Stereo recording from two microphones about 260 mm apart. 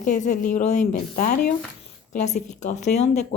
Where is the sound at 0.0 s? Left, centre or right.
Left.